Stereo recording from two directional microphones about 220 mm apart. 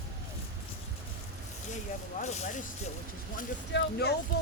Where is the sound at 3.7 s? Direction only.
55° left (ahead or behind).